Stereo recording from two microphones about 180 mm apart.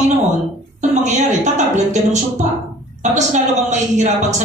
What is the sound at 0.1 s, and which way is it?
A woman's voice, 40° right (ahead or behind).